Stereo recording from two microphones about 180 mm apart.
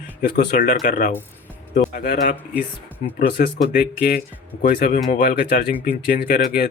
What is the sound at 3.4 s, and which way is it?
Speech, 45° left (ahead or behind).